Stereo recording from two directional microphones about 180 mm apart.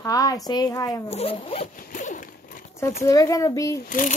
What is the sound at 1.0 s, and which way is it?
Speech, 35° left (ahead or behind).